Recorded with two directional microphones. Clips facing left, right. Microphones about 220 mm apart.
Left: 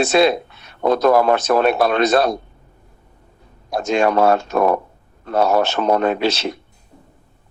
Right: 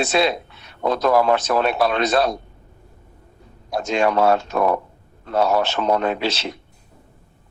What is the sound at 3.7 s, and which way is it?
A man's voice, 50° left (ahead or behind).